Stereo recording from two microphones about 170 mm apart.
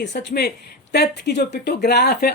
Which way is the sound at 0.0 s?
85° left.